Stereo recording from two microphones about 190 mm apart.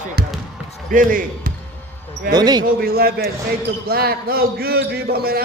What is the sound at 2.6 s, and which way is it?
Speech, 50° right (ahead or behind).